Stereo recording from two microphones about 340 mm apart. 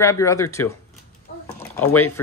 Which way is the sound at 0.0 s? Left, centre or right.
Centre.